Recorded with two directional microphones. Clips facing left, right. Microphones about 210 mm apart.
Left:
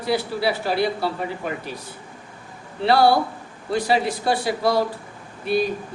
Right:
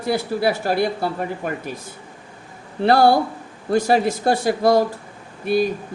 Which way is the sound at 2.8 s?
50° right (ahead or behind).